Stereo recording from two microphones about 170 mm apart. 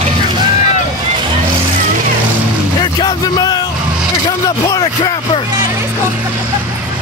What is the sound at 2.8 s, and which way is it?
Music, 25° left (ahead or behind).